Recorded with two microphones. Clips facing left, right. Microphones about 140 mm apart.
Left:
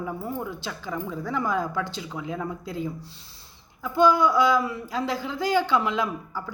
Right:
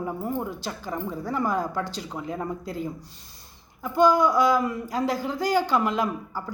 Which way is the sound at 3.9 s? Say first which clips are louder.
Even; 45° right (ahead or behind).